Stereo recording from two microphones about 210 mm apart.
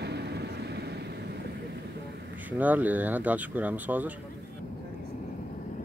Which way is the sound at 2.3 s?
10° right (ahead or behind).